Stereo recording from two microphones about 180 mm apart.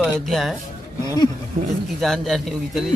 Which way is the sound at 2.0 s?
Centre (ahead or behind).